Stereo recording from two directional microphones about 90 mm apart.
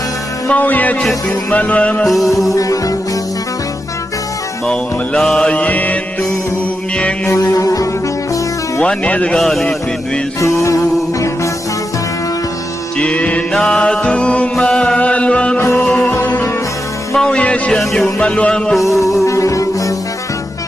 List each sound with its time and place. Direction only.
0.4 s music: 15° left (ahead or behind)
2.0 s a man's voice: centre (ahead or behind)
2.6 s music: 40° left (ahead or behind)
4.6 s music: 5° left (ahead or behind)
7.3 s music: 40° left (ahead or behind)
8.8 s music: 10° left (ahead or behind)
9.4 s a man's voice: centre (ahead or behind)
10.4 s music: 35° left (ahead or behind)
13.0 s music: 15° left (ahead or behind)
16.1 s music: 25° left (ahead or behind)
17.2 s music: 10° left (ahead or behind)
18.8 s music: 35° left (ahead or behind)